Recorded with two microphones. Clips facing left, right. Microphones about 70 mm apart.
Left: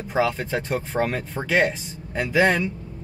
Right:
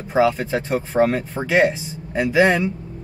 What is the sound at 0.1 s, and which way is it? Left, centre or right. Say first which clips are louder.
Speech: right 5 dB; right.